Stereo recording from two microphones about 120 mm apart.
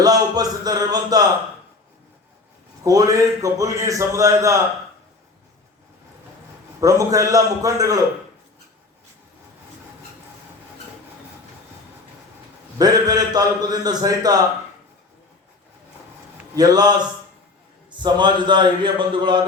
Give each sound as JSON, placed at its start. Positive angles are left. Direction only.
{"t": 0.0, "sound": "a man's voice", "side_deg": -30}
{"t": 2.8, "sound": "a man's voice", "side_deg": -30}
{"t": 6.7, "sound": "a man's voice", "side_deg": -30}
{"t": 12.8, "sound": "a man's voice", "side_deg": -35}
{"t": 16.6, "sound": "a man's voice", "side_deg": -35}
{"t": 17.9, "sound": "a man's voice", "side_deg": -40}